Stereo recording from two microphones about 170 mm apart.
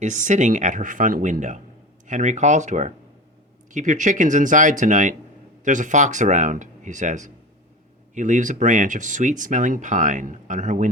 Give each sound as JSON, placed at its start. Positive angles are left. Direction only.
{"t": 0.0, "sound": "speech", "side_deg": -45}